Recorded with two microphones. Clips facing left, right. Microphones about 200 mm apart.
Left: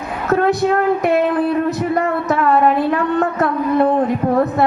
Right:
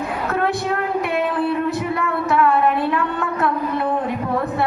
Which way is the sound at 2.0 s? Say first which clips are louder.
Left 2 dB; 40° left (ahead or behind).